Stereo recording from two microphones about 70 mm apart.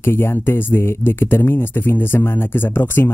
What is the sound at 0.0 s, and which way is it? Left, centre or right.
Speech, left.